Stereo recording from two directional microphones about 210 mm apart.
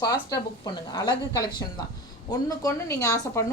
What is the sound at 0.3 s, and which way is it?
A woman's voice, 20° left (ahead or behind).